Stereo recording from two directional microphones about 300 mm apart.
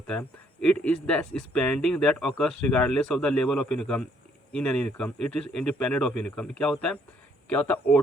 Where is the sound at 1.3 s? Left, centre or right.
Left.